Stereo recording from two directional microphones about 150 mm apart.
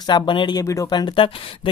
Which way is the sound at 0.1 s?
30° left (ahead or behind).